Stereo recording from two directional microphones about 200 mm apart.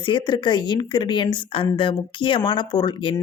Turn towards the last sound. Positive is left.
turn(degrees=25)  # may be behind; listen again after turning